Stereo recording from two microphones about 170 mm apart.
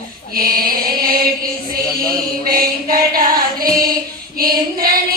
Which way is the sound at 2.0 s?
60° right (ahead or behind).